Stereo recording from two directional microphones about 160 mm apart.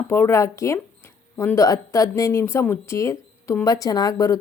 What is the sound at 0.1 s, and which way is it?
A woman's voice, 15° left (ahead or behind).